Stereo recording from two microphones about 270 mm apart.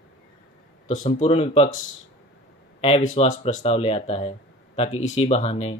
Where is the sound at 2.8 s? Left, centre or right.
Left.